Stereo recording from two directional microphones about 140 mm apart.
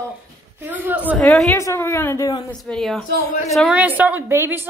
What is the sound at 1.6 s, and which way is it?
Speech, 20° left (ahead or behind).